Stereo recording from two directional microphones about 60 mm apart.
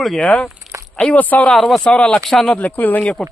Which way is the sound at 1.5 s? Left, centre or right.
Centre.